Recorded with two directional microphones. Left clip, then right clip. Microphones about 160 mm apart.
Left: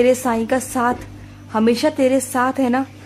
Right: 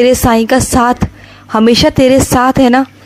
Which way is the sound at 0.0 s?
40° right (ahead or behind).